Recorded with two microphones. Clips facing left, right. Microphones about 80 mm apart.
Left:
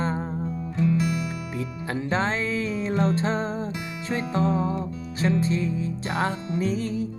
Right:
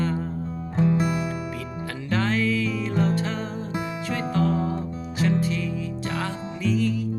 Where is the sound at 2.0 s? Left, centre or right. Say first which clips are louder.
Right 2 dB; left.